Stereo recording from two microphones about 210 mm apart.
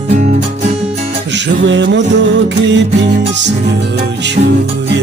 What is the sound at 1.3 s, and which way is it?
Music, 55° right (ahead or behind).